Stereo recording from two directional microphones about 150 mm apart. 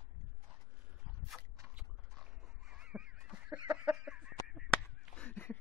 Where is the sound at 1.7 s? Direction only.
5° right (ahead or behind).